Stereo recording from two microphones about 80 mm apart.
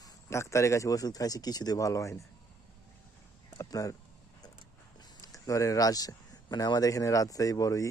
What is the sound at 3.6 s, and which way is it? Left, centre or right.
Speech, left.